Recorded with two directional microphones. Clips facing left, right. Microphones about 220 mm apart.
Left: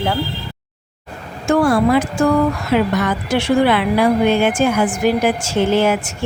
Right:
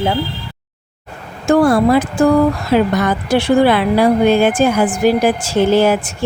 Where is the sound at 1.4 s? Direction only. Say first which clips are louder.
Right 3 dB; 35° right (ahead or behind).